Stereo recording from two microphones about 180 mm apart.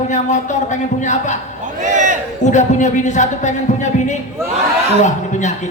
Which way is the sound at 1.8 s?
45° right (ahead or behind).